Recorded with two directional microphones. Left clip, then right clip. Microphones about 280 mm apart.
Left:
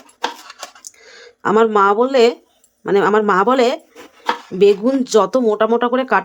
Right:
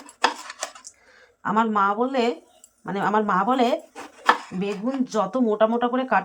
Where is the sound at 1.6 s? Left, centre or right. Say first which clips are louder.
Left 10 dB; left.